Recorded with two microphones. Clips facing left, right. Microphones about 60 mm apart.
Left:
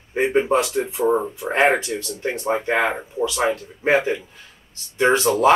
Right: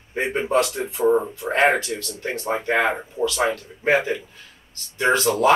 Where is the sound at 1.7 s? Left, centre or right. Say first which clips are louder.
Left 1 dB; centre.